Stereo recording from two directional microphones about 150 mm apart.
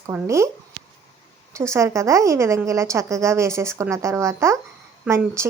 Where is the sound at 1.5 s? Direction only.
20° right (ahead or behind).